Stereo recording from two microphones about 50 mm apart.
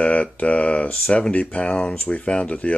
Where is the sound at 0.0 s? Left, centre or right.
Left.